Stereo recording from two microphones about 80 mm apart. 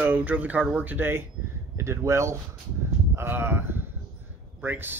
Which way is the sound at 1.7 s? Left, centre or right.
Right.